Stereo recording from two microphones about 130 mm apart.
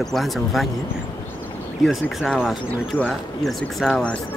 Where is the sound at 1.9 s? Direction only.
Centre (ahead or behind).